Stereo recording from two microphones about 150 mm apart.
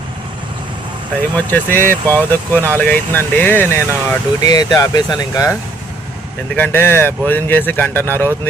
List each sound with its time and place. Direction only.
1.4 s speech: 10° left (ahead or behind)
4.4 s speech: 25° left (ahead or behind)
6.6 s speech: 15° left (ahead or behind)